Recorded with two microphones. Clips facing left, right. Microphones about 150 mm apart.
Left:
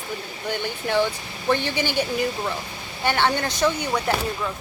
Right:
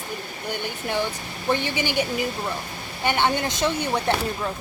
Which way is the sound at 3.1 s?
15° right (ahead or behind).